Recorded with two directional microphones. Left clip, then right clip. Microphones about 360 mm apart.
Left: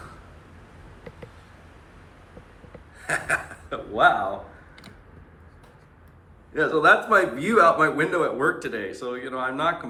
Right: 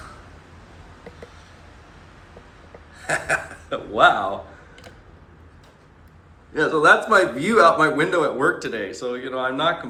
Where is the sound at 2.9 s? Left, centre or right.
Centre.